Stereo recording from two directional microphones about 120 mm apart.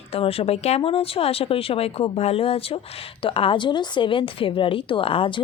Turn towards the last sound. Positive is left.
turn(degrees=50)  # may be behind; listen again after turning